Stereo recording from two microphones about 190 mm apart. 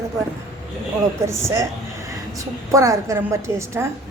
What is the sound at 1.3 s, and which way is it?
A woman's voice, 15° right (ahead or behind).